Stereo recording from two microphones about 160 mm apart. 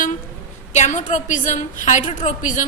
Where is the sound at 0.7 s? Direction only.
50° left (ahead or behind).